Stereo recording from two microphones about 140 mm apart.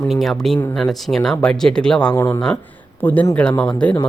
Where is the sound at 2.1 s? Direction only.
20° left (ahead or behind).